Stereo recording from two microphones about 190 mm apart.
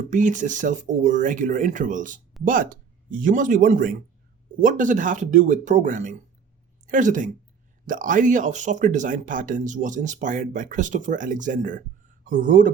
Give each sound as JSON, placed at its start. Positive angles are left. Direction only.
{"t": 0.1, "sound": "speech", "side_deg": -40}